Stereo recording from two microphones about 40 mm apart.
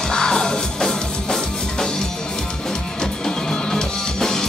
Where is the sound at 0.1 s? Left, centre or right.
Centre.